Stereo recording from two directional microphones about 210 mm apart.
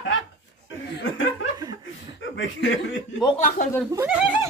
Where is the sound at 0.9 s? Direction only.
65° left (ahead or behind).